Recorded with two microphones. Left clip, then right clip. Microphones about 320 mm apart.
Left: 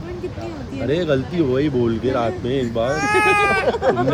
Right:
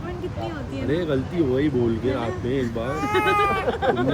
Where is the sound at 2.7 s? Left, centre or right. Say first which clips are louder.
Left 9 dB; left.